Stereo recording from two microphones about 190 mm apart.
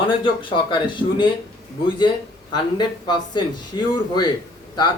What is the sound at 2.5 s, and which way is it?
Speech, 25° left (ahead or behind).